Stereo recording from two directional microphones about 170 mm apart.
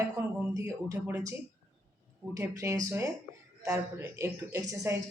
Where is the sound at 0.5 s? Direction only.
15° right (ahead or behind).